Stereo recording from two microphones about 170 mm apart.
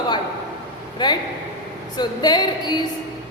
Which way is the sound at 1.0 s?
25° left (ahead or behind).